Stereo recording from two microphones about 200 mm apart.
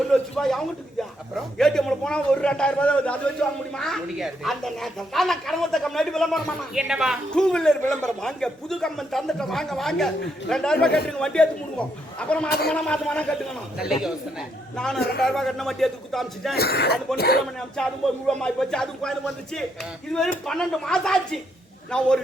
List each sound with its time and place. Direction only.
0.1 s a man's voice: centre (ahead or behind)
16.6 s speech: 50° left (ahead or behind)
17.8 s a woman's voice: 5° left (ahead or behind)